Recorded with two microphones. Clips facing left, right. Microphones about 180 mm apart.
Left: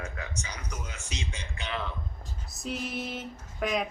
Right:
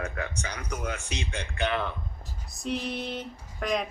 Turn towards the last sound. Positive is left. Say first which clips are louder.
# right 1 dB
turn(degrees=5)  # may be behind; listen again after turning